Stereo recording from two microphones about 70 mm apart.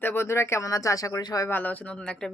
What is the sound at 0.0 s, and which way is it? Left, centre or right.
Speech, left.